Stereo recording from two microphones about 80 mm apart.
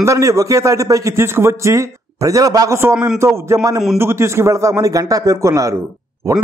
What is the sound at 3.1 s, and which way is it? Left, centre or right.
A man's voice, right.